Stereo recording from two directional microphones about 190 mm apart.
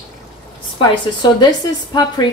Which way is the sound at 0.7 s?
25° left (ahead or behind).